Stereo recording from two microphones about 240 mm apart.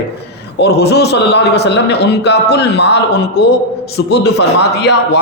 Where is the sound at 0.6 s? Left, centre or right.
Left.